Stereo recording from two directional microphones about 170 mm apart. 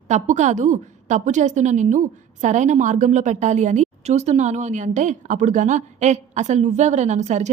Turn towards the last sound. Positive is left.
turn(degrees=-45)  # may be behind; listen again after turning